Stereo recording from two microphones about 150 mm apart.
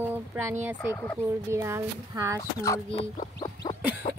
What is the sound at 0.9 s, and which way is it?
Speech, 15° left (ahead or behind).